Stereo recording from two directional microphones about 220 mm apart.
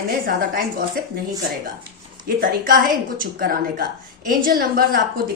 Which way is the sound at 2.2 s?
40° right (ahead or behind).